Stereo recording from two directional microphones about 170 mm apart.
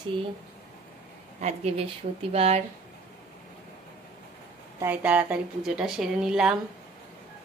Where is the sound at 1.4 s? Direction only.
40° right (ahead or behind).